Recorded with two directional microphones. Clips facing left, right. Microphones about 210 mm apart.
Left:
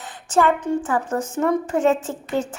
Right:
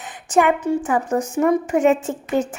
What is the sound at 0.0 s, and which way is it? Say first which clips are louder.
Speech: right 1 dB; 15° right (ahead or behind).